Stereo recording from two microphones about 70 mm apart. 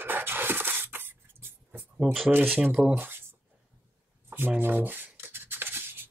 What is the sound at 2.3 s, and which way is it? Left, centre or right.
Speech, right.